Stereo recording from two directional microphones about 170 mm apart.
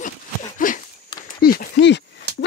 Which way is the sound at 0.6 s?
50° left (ahead or behind).